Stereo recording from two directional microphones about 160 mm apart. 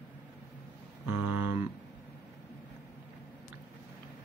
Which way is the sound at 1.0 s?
15° right (ahead or behind).